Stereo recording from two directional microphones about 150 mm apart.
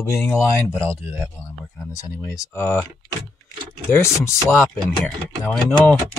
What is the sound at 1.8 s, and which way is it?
Speech, 20° left (ahead or behind).